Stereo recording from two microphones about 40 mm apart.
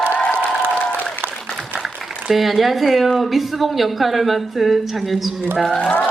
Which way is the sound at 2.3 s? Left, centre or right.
Centre.